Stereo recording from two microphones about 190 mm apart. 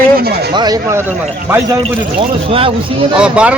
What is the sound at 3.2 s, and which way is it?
Speech, 5° right (ahead or behind).